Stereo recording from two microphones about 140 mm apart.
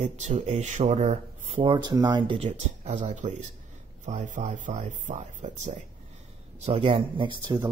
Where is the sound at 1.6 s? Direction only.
35° right (ahead or behind); by 5.7 s 55° right (ahead or behind).